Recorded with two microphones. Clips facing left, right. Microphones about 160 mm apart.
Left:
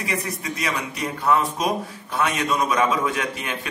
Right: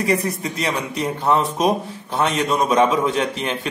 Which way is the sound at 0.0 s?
35° right (ahead or behind).